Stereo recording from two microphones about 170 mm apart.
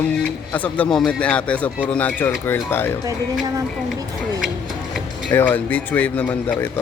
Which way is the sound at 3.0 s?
20° right (ahead or behind).